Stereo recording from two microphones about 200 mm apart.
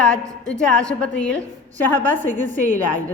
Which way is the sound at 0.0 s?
5° left (ahead or behind).